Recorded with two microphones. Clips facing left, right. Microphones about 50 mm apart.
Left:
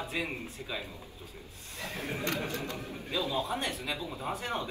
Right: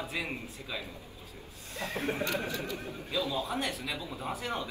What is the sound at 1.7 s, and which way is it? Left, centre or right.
Speech, right.